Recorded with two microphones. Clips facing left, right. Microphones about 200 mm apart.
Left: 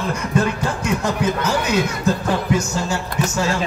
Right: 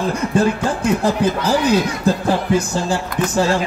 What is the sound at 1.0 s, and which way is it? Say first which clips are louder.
Speech: right 3 dB; 30° right (ahead or behind).